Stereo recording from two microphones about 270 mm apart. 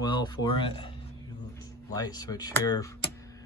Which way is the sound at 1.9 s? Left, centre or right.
Centre.